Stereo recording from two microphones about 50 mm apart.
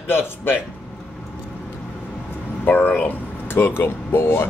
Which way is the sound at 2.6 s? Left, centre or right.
Left.